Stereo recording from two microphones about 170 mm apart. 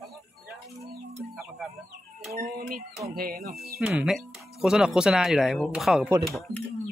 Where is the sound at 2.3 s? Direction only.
50° right (ahead or behind).